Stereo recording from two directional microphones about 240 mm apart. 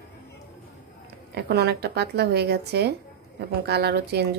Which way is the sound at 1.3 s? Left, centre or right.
Right.